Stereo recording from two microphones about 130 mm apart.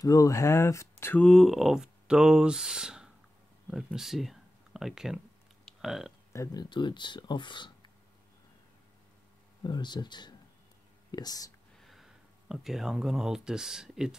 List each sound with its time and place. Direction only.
0.0 s speech: 25° left (ahead or behind)
1.2 s speech: centre (ahead or behind)
5.7 s a sound: centre (ahead or behind)
6.3 s speech: 25° left (ahead or behind)
9.6 s speech: 35° left (ahead or behind)
11.8 s speech: centre (ahead or behind)